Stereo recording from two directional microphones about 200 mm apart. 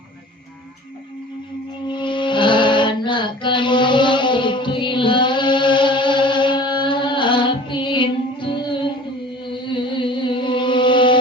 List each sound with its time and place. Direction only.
1.9 s music: 25° left (ahead or behind)